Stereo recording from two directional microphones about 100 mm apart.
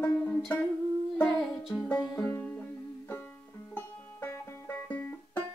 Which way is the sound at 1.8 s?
10° left (ahead or behind).